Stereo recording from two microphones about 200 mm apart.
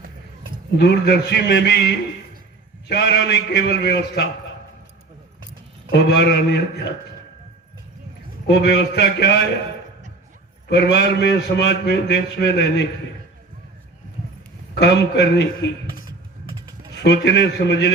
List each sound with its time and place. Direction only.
0.8 s a man's voice: 55° left (ahead or behind)
5.9 s a man's voice: 55° left (ahead or behind)
8.4 s a man's voice: 60° left (ahead or behind)
10.7 s a man's voice: 60° left (ahead or behind)
14.8 s a man's voice: 60° left (ahead or behind)
17.0 s a man's voice: 60° left (ahead or behind)